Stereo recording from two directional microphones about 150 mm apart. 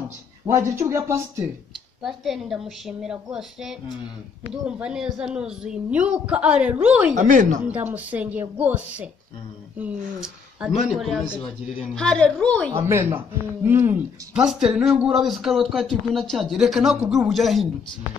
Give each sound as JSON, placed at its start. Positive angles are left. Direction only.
{"t": 0.5, "sound": "speech", "side_deg": -20}
{"t": 2.0, "sound": "speech", "side_deg": 0}
{"t": 4.6, "sound": "a woman's voice", "side_deg": -5}
{"t": 7.2, "sound": "speech", "side_deg": -55}
{"t": 7.6, "sound": "a woman's voice", "side_deg": -10}
{"t": 11.9, "sound": "a woman's voice", "side_deg": 5}
{"t": 12.7, "sound": "a woman's voice", "side_deg": -15}